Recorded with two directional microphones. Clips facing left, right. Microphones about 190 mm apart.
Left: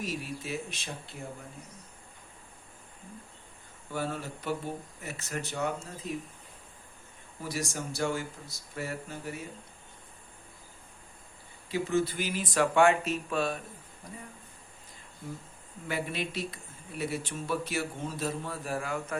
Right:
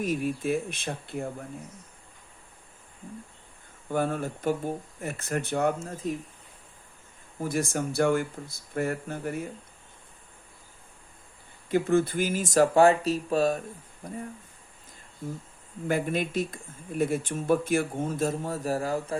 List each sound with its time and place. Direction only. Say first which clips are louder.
0.0 s speech: right 8 dB; 50° right (ahead or behind)
3.8 s speech: right 7 dB; 50° right (ahead or behind)
7.4 s speech: right 7 dB; 55° right (ahead or behind)
11.7 s speech: right 5 dB; 55° right (ahead or behind)
15.9 s speech: right 7 dB; 50° right (ahead or behind)